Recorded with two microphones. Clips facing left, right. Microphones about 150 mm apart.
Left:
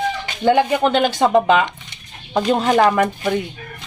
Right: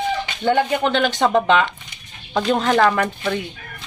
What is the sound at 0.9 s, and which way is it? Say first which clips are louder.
Speech: left 2 dB; 10° left (ahead or behind).